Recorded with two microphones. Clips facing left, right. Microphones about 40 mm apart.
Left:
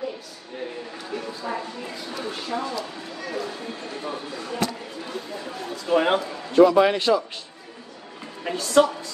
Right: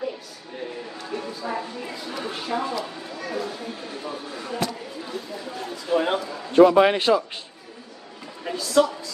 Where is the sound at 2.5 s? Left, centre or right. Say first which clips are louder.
Right 2 dB; centre.